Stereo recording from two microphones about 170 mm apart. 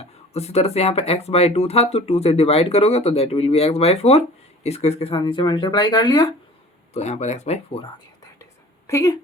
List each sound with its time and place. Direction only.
0.0 s speech: 40° left (ahead or behind)
6.9 s speech: 40° left (ahead or behind)
8.9 s speech: 15° left (ahead or behind)